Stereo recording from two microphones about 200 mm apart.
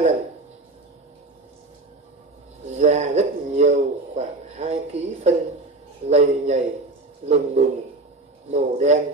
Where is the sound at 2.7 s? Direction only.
35° right (ahead or behind).